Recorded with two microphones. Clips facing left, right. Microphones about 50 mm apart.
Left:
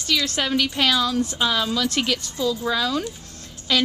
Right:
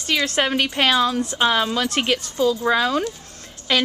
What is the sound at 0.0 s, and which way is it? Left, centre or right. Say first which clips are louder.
A woman's voice: right 3 dB; right.